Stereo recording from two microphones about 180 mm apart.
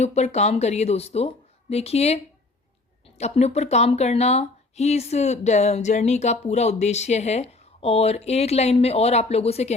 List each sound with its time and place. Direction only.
0.0 s speech: 40° left (ahead or behind)